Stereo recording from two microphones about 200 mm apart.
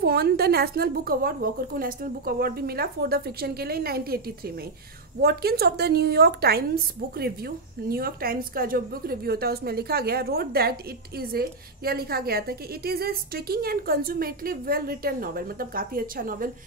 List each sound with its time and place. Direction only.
0.0 s a woman's voice: 50° right (ahead or behind)
5.2 s a woman's voice: 50° right (ahead or behind)